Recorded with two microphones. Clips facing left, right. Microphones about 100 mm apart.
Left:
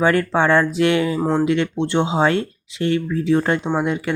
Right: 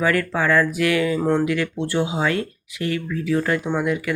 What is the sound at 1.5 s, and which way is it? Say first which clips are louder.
Speech: left 4 dB; 25° left (ahead or behind).